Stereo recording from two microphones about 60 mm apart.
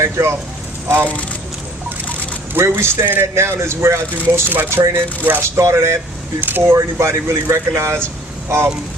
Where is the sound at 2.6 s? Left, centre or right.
Right.